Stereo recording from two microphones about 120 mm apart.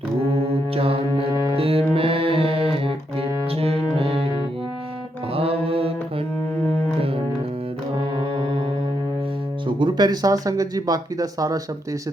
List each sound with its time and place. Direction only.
0.7 s music: 55° right (ahead or behind)
5.3 s music: 55° right (ahead or behind)
9.6 s speech: 40° right (ahead or behind)